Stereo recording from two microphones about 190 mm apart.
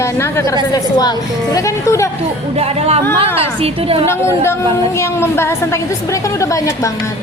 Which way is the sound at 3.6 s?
30° right (ahead or behind).